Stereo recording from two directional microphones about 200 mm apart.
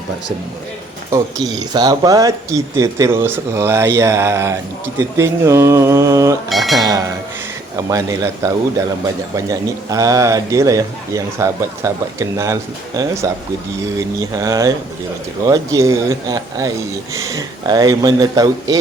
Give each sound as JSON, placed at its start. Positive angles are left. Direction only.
{"t": 1.1, "sound": "speech", "side_deg": -20}
{"t": 6.5, "sound": "speech", "side_deg": 0}
{"t": 7.8, "sound": "speech", "side_deg": -15}
{"t": 9.3, "sound": "speech", "side_deg": -15}